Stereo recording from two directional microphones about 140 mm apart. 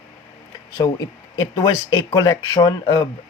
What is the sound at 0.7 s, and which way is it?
Speech, 25° left (ahead or behind).